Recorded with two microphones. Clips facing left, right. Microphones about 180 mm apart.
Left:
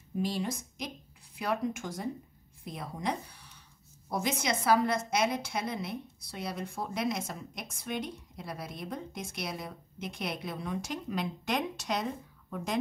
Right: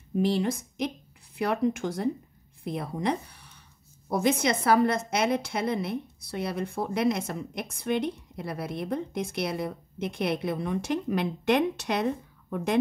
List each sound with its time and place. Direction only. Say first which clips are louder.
0.1 s a woman's voice: right 7 dB; 60° right (ahead or behind)